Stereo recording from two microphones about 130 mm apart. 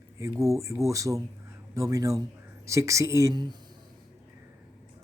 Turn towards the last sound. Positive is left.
turn(degrees=-25)  # may be behind; listen again after turning